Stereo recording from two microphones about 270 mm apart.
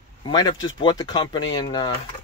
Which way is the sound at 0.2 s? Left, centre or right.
Centre.